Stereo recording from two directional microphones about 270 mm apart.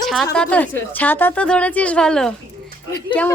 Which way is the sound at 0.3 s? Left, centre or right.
Centre.